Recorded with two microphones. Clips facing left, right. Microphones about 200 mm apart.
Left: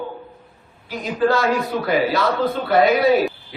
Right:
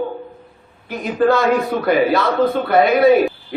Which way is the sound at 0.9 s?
55° right (ahead or behind).